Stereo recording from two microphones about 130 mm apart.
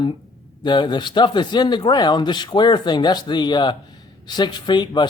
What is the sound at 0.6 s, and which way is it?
Speech, 35° left (ahead or behind).